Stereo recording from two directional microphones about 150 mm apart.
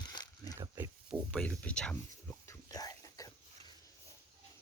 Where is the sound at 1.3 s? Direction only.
5° left (ahead or behind).